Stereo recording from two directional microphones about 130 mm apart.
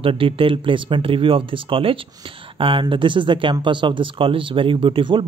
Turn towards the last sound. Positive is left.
turn(degrees=-40)  # may be behind; listen again after turning